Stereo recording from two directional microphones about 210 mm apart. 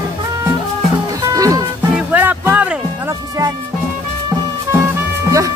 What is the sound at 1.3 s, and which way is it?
Music, 15° right (ahead or behind).